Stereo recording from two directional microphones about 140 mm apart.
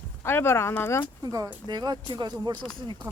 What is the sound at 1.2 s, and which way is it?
Speech, 25° right (ahead or behind).